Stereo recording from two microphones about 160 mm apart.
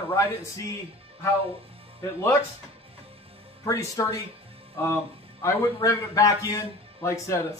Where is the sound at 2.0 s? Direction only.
15° left (ahead or behind).